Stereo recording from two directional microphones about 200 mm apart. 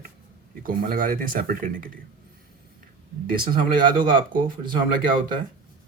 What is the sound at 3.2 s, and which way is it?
Speech, 45° right (ahead or behind).